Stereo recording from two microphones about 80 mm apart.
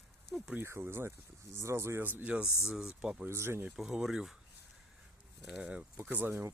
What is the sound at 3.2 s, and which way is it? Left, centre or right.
Speech, right.